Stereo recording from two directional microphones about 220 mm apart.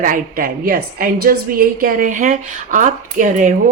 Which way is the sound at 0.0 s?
40° right (ahead or behind).